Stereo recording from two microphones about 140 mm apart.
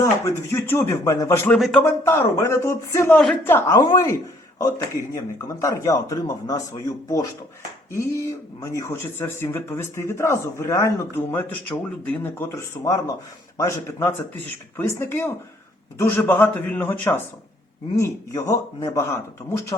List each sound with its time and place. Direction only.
0.0 s speech: 20° left (ahead or behind)
1.5 s speech: centre (ahead or behind)
1.8 s speech: 15° left (ahead or behind)
8.6 s speech: 20° left (ahead or behind)